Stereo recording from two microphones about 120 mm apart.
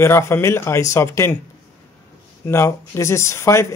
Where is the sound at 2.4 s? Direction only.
25° left (ahead or behind).